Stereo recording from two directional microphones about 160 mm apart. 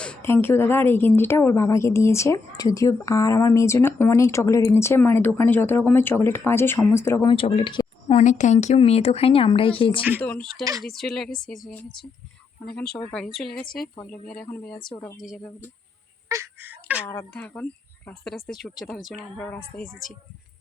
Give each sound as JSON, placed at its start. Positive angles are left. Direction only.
{"t": 0.0, "sound": "speech", "side_deg": 10}
{"t": 7.3, "sound": "speech", "side_deg": 35}
{"t": 8.2, "sound": "speech", "side_deg": 50}
{"t": 10.2, "sound": "speech", "side_deg": 10}
{"t": 10.6, "sound": "speech", "side_deg": -20}
{"t": 10.8, "sound": "speech", "side_deg": 0}
{"t": 14.9, "sound": "speech", "side_deg": 20}
{"t": 16.3, "sound": "a sound", "side_deg": -15}
{"t": 17.3, "sound": "speech", "side_deg": 10}
{"t": 19.7, "sound": "speech", "side_deg": 10}